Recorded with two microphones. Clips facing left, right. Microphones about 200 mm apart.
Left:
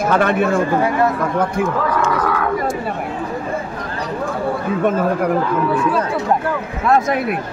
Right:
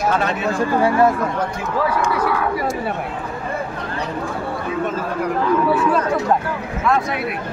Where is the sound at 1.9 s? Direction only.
10° right (ahead or behind).